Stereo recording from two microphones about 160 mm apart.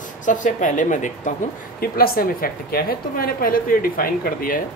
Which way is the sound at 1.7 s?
65° left (ahead or behind).